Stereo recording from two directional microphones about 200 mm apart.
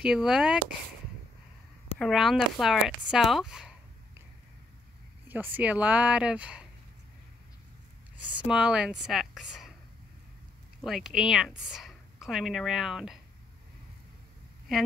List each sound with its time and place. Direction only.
0.0 s speech: centre (ahead or behind)
2.0 s speech: centre (ahead or behind)
5.3 s speech: 10° right (ahead or behind)
8.5 s speech: 5° right (ahead or behind)
10.8 s speech: centre (ahead or behind)